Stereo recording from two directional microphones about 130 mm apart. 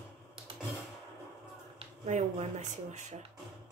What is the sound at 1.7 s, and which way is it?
Speech, 55° right (ahead or behind).